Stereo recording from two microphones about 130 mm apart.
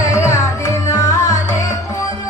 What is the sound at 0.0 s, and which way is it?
Music, 25° left (ahead or behind).